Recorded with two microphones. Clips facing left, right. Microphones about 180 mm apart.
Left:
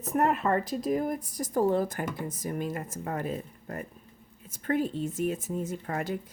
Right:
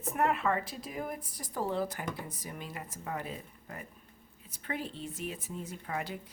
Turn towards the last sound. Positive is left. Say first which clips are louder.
# left 5 dB
turn(degrees=45)  # may be behind; listen again after turning